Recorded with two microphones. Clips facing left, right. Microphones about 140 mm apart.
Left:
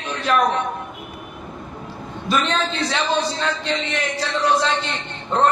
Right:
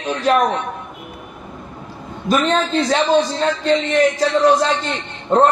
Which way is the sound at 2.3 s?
40° right (ahead or behind).